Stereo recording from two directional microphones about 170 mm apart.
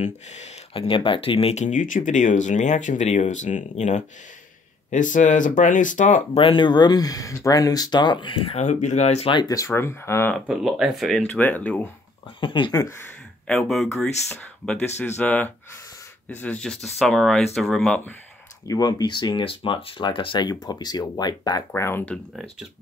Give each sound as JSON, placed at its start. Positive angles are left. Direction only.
{"t": 0.0, "sound": "speech", "side_deg": 45}
{"t": 6.3, "sound": "speech", "side_deg": 30}
{"t": 10.4, "sound": "speech", "side_deg": -5}
{"t": 12.4, "sound": "speech", "side_deg": 30}
{"t": 13.5, "sound": "speech", "side_deg": 0}
{"t": 18.7, "sound": "speech", "side_deg": 25}